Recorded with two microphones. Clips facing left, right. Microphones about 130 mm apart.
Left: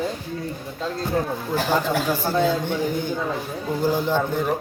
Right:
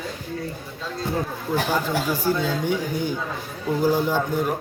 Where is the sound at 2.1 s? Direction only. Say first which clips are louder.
Left 2 dB; 10° right (ahead or behind).